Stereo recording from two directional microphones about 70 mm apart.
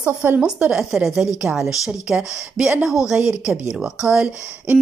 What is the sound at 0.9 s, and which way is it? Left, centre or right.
A woman's voice, centre.